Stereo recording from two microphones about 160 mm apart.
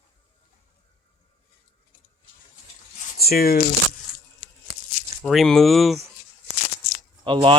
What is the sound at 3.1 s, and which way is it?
Speech, 70° left (ahead or behind).